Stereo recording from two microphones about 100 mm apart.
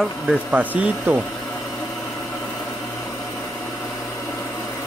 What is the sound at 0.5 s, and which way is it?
Speech, 15° right (ahead or behind).